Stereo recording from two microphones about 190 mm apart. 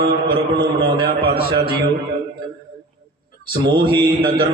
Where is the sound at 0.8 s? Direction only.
25° right (ahead or behind).